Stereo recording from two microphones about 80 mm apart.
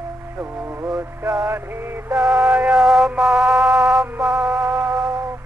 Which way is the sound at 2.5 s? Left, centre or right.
Centre.